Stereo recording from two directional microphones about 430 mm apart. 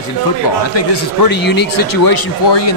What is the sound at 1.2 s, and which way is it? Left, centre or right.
Speech, left.